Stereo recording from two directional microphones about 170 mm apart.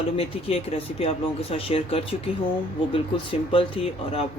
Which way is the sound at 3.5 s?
35° left (ahead or behind).